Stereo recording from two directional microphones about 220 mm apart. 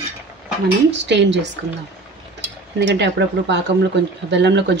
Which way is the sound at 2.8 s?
55° right (ahead or behind).